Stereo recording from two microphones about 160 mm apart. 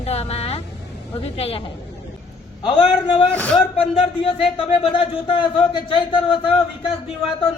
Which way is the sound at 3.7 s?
35° left (ahead or behind).